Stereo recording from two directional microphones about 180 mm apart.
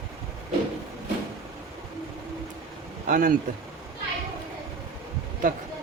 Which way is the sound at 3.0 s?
50° right (ahead or behind).